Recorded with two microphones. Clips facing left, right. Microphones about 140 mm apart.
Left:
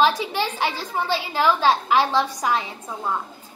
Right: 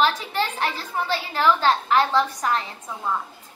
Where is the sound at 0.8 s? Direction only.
90° left.